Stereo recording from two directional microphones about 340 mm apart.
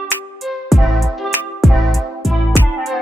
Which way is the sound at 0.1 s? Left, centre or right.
Centre.